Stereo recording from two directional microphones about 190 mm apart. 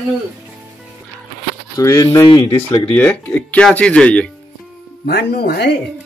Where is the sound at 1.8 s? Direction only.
15° left (ahead or behind).